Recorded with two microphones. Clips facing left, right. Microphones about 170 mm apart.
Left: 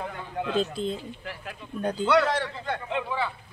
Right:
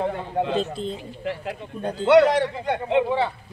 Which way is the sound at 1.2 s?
25° right (ahead or behind).